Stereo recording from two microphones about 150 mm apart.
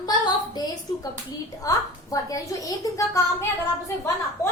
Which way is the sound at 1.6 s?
25° left (ahead or behind).